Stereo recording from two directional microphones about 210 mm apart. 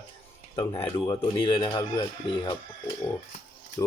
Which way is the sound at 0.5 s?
25° left (ahead or behind).